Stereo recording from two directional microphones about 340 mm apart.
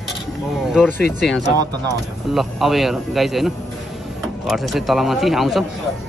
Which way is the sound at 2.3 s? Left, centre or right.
Centre.